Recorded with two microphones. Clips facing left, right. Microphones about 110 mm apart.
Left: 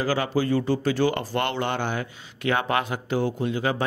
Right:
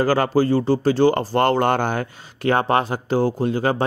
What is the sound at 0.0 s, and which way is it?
Speech, 45° right (ahead or behind).